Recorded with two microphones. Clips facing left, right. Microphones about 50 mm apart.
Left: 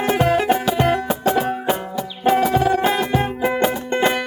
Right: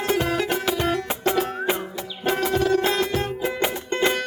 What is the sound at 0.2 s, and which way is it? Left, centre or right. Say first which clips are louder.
Music: left 6 dB; left.